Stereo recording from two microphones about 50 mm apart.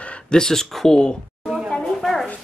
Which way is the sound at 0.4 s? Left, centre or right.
Centre.